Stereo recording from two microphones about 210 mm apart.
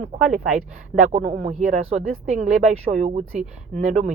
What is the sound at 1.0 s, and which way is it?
Speech, 35° right (ahead or behind).